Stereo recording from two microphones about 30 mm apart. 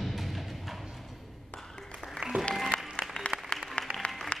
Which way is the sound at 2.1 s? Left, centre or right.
Right.